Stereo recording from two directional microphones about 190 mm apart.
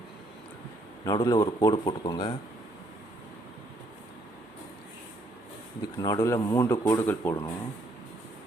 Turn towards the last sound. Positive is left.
turn(degrees=10)  # may be behind; listen again after turning